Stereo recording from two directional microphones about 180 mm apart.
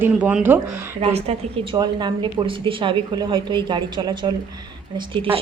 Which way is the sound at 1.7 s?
25° right (ahead or behind).